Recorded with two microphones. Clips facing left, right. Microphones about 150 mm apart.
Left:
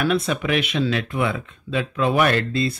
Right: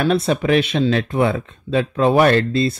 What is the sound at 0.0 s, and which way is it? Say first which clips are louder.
Speech: right 4 dB; 30° right (ahead or behind).